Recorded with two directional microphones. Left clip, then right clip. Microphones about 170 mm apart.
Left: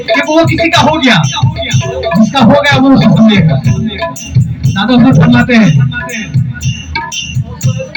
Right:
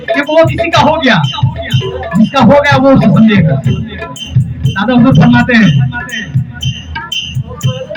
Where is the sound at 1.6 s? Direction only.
40° left (ahead or behind).